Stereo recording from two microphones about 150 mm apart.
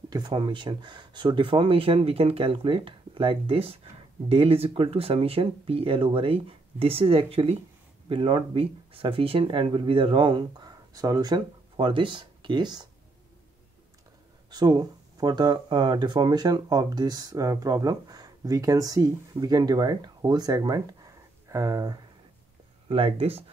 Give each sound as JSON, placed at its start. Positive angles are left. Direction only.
{"t": 0.1, "sound": "speech", "side_deg": -30}
{"t": 14.5, "sound": "speech", "side_deg": -30}
{"t": 22.8, "sound": "speech", "side_deg": -40}